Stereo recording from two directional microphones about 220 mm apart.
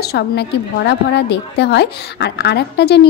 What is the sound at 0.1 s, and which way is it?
A woman's voice, 50° left (ahead or behind).